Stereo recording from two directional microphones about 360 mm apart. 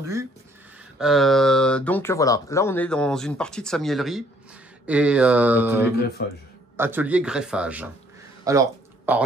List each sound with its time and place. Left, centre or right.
0.0 s speech: centre
5.9 s a man's voice: left
6.8 s speech: centre
8.5 s a sound: centre